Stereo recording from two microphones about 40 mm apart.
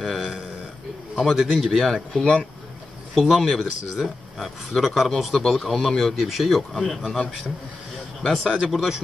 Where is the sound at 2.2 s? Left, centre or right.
Left.